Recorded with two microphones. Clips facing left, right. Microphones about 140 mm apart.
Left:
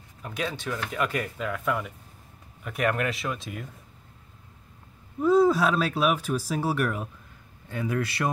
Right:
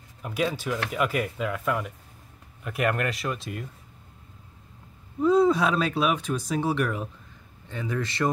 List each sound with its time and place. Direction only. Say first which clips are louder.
0.2 s speech: right 4 dB; 5° right (ahead or behind)
5.2 s a man's voice: even; centre (ahead or behind)